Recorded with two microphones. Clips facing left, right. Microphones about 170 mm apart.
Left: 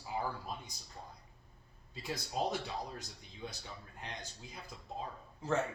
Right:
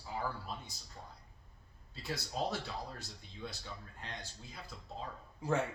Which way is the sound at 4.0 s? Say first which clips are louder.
Left 4 dB; 20° left (ahead or behind).